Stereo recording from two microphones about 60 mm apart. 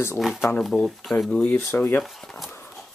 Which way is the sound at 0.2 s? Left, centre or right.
Centre.